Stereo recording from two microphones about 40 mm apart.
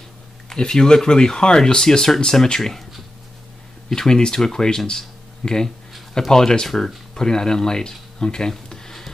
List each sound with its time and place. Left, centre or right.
0.6 s speech: centre
3.9 s speech: centre